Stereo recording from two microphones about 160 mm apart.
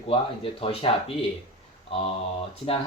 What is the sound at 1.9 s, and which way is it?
Speech, 40° left (ahead or behind).